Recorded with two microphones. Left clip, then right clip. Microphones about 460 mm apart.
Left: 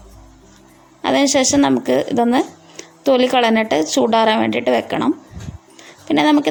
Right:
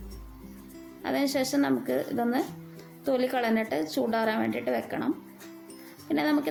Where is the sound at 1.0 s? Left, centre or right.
Left.